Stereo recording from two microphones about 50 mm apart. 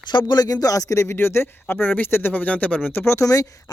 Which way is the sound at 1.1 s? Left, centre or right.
Left.